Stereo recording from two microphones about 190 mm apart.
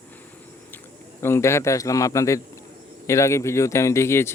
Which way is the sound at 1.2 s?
15° left (ahead or behind).